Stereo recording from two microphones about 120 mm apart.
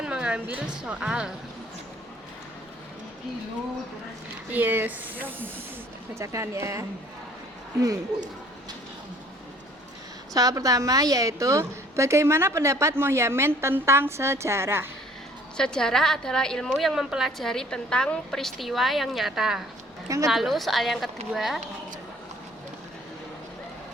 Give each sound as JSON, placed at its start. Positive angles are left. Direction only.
{"t": 0.0, "sound": "a woman's voice", "side_deg": -10}
{"t": 4.5, "sound": "a woman's voice", "side_deg": -15}
{"t": 10.3, "sound": "a woman's voice", "side_deg": -30}
{"t": 15.5, "sound": "a woman's voice", "side_deg": 5}